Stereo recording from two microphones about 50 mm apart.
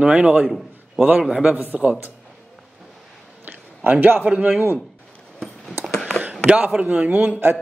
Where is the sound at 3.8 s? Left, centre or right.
Right.